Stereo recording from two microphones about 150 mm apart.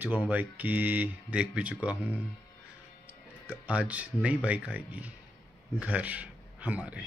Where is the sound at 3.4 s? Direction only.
10° right (ahead or behind).